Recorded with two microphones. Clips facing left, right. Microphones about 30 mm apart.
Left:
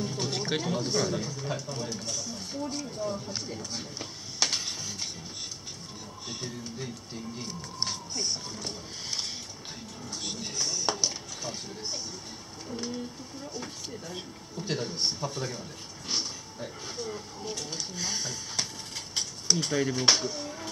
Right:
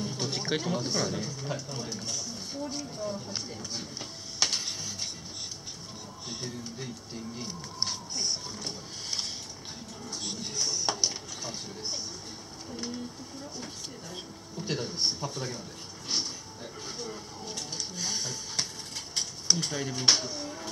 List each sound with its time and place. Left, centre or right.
0.0 s speech: centre
6.2 s speech: centre